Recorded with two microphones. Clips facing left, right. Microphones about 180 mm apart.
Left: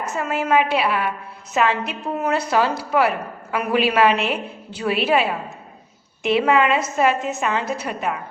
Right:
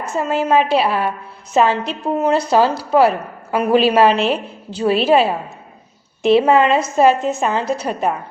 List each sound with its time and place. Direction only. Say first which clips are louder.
0.0 s a woman's voice: right 4 dB; 30° right (ahead or behind)